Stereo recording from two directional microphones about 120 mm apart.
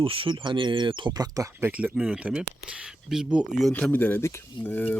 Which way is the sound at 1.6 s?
10° right (ahead or behind).